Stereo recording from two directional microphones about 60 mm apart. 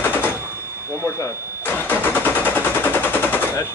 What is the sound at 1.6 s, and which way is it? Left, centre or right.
Vehicle, left.